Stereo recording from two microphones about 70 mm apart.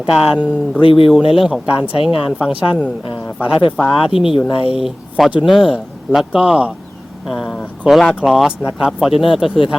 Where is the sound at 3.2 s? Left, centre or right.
Left.